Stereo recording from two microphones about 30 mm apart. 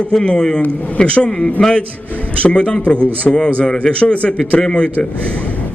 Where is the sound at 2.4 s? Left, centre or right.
Left.